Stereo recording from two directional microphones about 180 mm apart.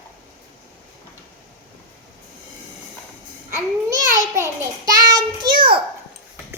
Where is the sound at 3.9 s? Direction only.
15° right (ahead or behind).